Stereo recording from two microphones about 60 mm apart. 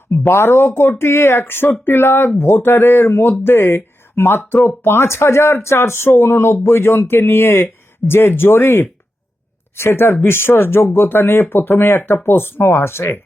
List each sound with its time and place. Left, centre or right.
0.3 s speech: left